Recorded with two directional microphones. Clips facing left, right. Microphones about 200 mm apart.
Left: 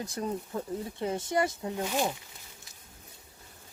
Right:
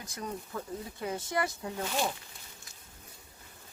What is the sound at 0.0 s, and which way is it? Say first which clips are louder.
Speech: left 6 dB; 25° left (ahead or behind).